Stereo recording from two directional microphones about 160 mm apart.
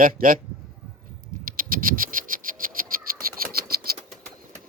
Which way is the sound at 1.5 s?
60° right (ahead or behind).